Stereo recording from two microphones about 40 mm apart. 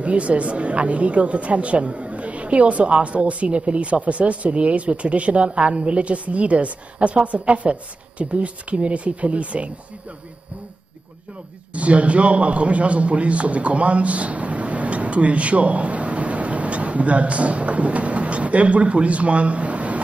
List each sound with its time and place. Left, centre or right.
0.0 s a woman's voice: right
11.7 s a man's voice: right